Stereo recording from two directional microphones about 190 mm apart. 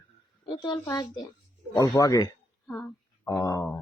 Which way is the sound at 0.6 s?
20° left (ahead or behind).